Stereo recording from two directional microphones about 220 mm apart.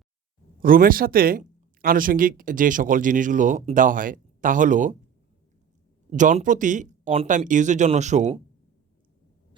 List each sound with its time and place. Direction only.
0.6 s speech: 40° right (ahead or behind)
6.1 s speech: 35° right (ahead or behind)